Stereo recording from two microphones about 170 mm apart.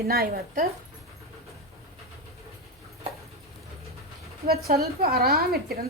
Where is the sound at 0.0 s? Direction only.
65° right (ahead or behind).